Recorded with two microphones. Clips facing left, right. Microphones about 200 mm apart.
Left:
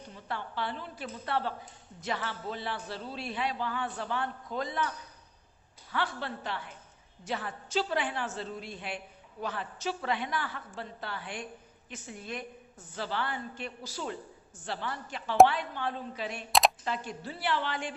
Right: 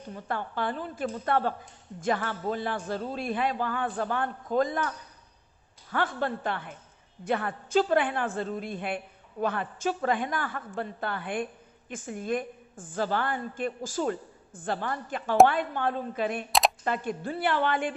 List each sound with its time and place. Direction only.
0.1 s a woman's voice: 50° right (ahead or behind)
5.9 s a woman's voice: 50° right (ahead or behind)
16.5 s camera: centre (ahead or behind)
16.8 s a woman's voice: 55° right (ahead or behind)